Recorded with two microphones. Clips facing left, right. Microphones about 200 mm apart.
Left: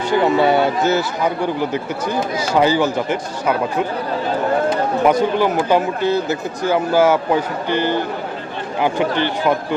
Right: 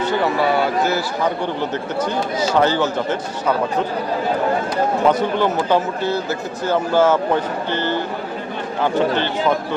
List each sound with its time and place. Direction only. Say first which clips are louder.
0.1 s speech: left 6 dB; 25° left (ahead or behind)
1.7 s speech: even; 10° left (ahead or behind)
5.0 s speech: left 3 dB; 10° left (ahead or behind)